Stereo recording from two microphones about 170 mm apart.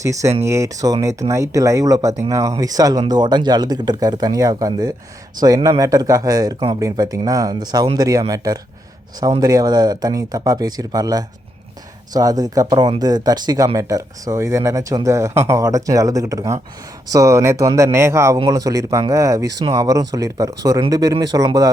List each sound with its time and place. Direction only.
0.0 s speech: 20° right (ahead or behind)
9.3 s speech: 20° right (ahead or behind)